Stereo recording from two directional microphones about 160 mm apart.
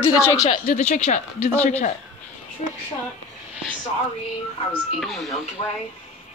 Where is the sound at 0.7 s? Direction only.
45° left (ahead or behind).